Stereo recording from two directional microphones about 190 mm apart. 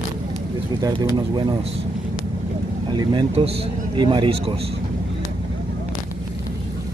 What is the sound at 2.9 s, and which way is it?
Speech, 20° right (ahead or behind).